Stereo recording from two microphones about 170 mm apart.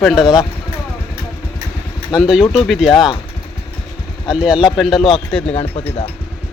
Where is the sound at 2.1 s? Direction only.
5° right (ahead or behind).